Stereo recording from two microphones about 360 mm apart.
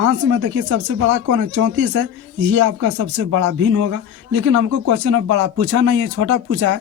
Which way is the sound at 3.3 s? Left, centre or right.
Right.